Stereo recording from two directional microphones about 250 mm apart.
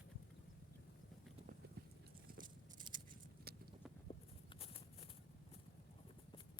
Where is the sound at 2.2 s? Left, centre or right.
Right.